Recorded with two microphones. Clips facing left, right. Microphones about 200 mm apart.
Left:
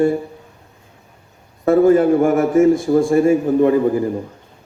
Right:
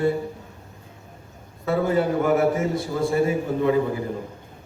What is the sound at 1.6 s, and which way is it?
A man's voice, 50° left (ahead or behind).